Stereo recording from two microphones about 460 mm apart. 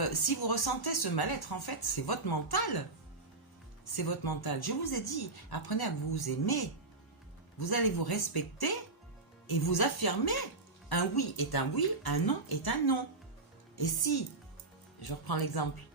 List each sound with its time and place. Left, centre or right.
0.0 s speech: left
3.8 s speech: left